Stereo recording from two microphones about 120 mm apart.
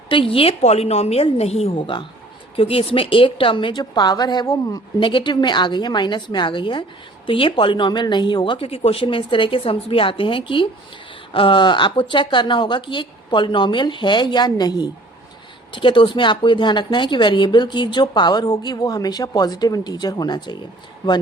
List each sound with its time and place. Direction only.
0.1 s a woman's voice: 45° left (ahead or behind)